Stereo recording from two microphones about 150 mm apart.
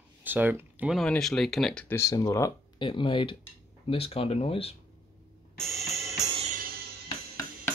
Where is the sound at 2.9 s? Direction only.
35° left (ahead or behind).